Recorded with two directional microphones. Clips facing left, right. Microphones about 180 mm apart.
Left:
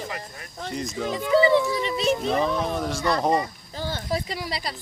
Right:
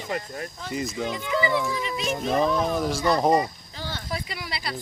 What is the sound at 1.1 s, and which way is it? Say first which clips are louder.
Speech: left 8 dB; 35° left (ahead or behind).